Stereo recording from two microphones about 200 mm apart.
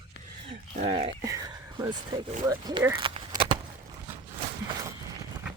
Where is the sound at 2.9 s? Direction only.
25° right (ahead or behind).